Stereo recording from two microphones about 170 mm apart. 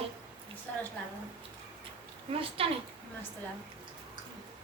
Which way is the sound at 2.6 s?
35° right (ahead or behind).